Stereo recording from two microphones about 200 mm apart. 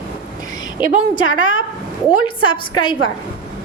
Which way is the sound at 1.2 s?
75° left (ahead or behind).